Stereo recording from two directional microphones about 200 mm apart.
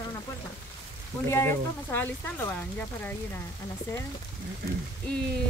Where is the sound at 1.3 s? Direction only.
10° left (ahead or behind).